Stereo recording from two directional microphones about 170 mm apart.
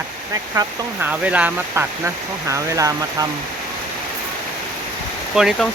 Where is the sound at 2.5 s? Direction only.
20° right (ahead or behind).